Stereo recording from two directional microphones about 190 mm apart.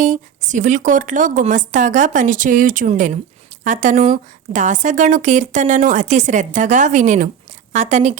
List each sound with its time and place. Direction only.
0.0 s a woman's voice: 40° right (ahead or behind)